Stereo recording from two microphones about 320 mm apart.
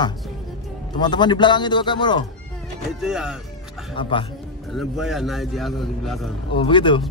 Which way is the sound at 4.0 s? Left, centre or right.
Centre.